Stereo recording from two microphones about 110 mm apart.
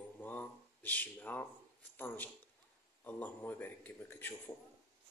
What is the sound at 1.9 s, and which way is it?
Speech, 15° left (ahead or behind).